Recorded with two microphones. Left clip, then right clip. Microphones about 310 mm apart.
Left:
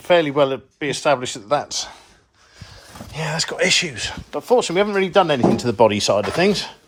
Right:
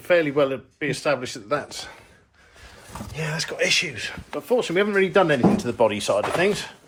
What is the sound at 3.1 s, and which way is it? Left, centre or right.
Speech, left.